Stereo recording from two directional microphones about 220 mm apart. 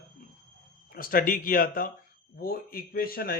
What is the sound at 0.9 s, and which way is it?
A man's voice, 40° left (ahead or behind).